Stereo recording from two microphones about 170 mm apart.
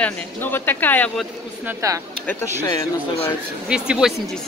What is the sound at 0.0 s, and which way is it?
Speech, 10° left (ahead or behind).